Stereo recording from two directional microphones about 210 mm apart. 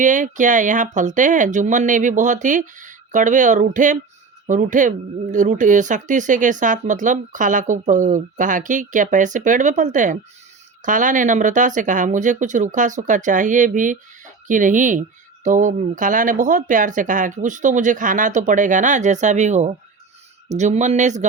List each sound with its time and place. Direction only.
0.0 s speech: 35° right (ahead or behind)